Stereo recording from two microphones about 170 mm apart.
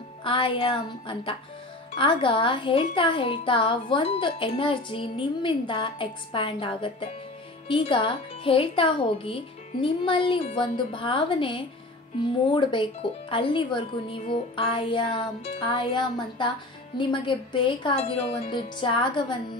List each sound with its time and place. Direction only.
0.2 s speech: 30° left (ahead or behind)